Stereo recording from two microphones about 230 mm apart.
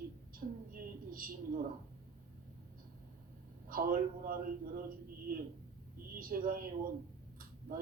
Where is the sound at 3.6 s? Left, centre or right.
Right.